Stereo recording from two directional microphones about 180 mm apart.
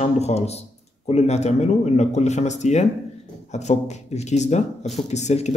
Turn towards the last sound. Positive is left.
turn(degrees=40)  # may be behind; listen again after turning